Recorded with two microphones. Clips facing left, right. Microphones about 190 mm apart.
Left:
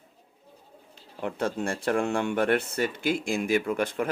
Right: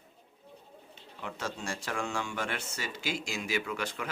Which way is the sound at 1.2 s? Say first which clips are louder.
Left 9 dB; 55° left (ahead or behind).